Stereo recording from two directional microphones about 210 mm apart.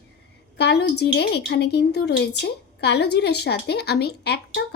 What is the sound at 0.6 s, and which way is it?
A woman's voice, 50° left (ahead or behind).